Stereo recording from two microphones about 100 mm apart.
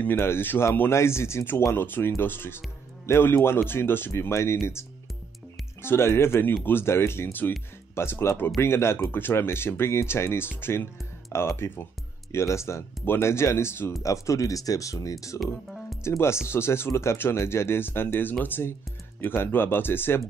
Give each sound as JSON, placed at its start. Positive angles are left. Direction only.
{"t": 0.0, "sound": "speech", "side_deg": 25}
{"t": 5.8, "sound": "speech", "side_deg": 25}
{"t": 15.4, "sound": "music", "side_deg": 0}
{"t": 16.0, "sound": "speech", "side_deg": 25}